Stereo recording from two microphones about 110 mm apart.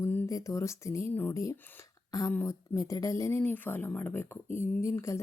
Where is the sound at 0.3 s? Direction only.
30° left (ahead or behind).